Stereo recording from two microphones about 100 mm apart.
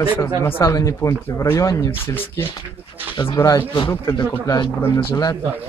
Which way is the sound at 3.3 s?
35° left (ahead or behind).